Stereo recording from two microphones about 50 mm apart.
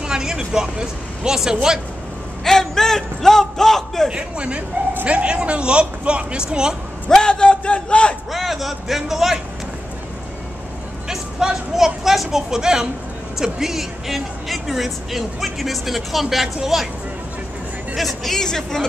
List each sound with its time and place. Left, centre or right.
0.0 s speech: centre
2.4 s a man's voice: centre
4.1 s a man's voice: right
7.1 s a man's voice: centre
8.3 s speech: centre
11.1 s speech: centre
17.9 s speech: centre